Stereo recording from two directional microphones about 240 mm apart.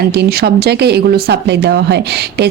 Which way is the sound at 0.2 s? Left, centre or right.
Right.